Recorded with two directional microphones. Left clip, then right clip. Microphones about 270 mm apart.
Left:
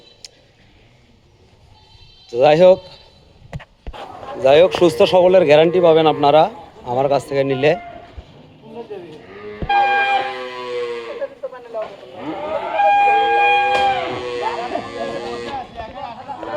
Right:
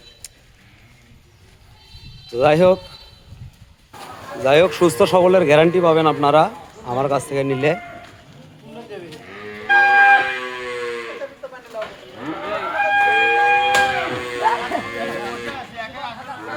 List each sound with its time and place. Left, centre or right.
2.2 s speech: centre
4.4 s a man's voice: centre
9.7 s a sound: right